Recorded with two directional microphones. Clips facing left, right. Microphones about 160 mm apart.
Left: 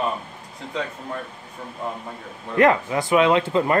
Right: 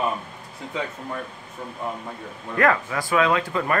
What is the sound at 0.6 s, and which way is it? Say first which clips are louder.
Speech: even; 5° right (ahead or behind).